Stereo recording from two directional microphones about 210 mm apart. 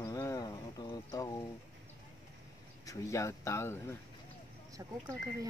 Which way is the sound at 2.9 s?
15° left (ahead or behind).